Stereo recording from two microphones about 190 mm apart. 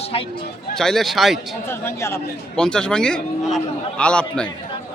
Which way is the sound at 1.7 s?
15° left (ahead or behind).